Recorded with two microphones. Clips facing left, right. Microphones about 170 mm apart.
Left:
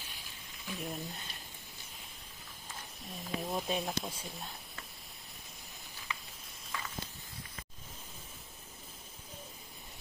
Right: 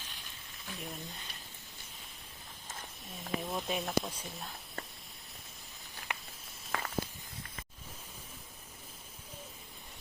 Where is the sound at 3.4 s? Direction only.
Centre (ahead or behind).